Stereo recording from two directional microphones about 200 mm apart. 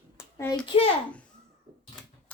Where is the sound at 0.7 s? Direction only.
25° left (ahead or behind).